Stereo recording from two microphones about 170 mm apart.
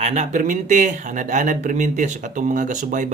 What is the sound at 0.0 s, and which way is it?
Speech, 40° right (ahead or behind).